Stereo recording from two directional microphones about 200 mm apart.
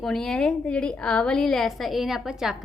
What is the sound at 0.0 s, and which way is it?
A woman's voice, centre (ahead or behind).